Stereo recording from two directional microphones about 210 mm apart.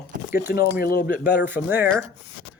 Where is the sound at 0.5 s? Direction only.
45° left (ahead or behind).